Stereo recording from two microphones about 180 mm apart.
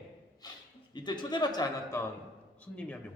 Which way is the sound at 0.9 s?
25° left (ahead or behind).